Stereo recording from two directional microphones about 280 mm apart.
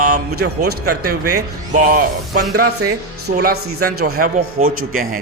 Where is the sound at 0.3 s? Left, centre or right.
Right.